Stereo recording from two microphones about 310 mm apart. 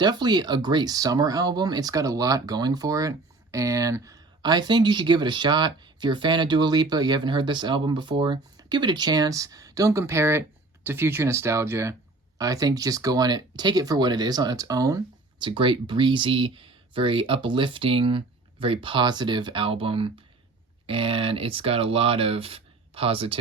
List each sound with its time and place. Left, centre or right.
0.0 s speech: centre